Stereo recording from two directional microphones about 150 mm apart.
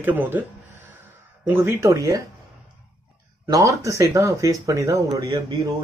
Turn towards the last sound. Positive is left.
turn(degrees=-25)  # may be behind; listen again after turning